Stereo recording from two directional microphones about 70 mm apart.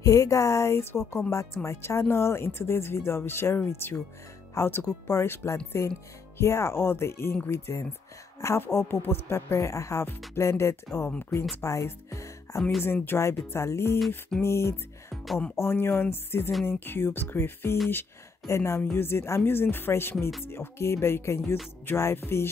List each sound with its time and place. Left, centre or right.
0.0 s speech: left
12.8 s speech: left
13.9 s music: centre
14.4 s music: left
15.5 s speech: left